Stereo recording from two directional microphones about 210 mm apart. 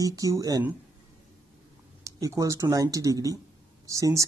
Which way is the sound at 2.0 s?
15° right (ahead or behind).